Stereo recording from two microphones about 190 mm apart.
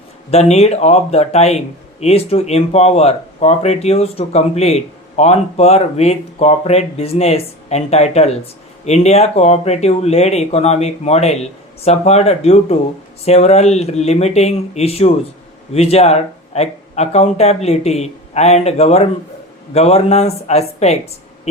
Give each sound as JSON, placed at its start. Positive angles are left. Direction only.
{"t": 0.3, "sound": "speech", "side_deg": 35}